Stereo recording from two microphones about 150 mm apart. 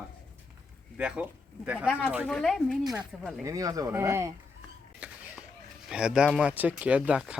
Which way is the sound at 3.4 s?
20° right (ahead or behind).